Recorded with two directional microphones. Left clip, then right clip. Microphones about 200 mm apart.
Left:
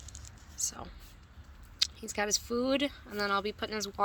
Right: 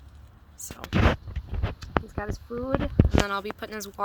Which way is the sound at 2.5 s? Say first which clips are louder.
Left 1 dB; 40° left (ahead or behind).